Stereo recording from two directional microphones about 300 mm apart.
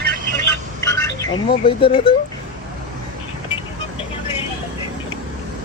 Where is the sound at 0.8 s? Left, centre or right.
Centre.